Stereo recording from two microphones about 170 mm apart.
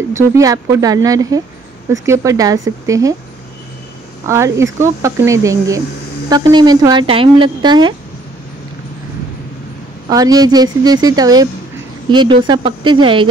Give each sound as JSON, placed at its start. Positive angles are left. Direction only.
{"t": 0.1, "sound": "speech", "side_deg": -15}
{"t": 4.3, "sound": "speech", "side_deg": -15}
{"t": 10.0, "sound": "speech", "side_deg": -20}